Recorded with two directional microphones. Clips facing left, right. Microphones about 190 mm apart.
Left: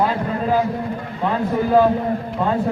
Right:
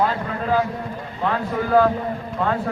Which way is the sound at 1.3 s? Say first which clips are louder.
Left 3 dB; 20° left (ahead or behind).